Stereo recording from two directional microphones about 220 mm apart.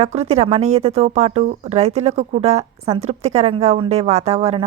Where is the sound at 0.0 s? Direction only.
30° right (ahead or behind).